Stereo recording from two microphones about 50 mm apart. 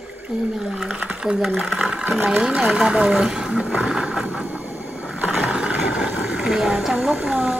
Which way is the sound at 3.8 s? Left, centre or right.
Centre.